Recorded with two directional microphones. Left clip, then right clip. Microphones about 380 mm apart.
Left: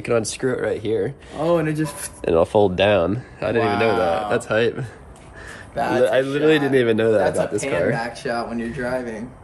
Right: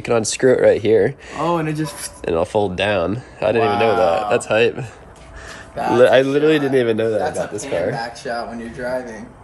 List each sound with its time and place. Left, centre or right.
0.0 s speech: centre
6.0 s a man's voice: right
6.3 s speech: centre
7.2 s speech: centre